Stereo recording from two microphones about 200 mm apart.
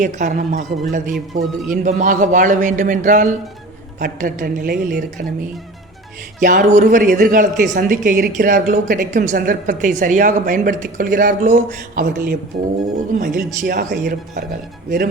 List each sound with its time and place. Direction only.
0.0 s a man's voice: 40° right (ahead or behind)
1.1 s a man's voice: centre (ahead or behind)
1.7 s a man's voice: 35° right (ahead or behind)
6.4 s a man's voice: 40° right (ahead or behind)